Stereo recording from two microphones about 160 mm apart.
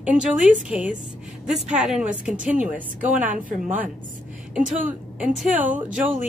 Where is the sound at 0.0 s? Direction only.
5° right (ahead or behind).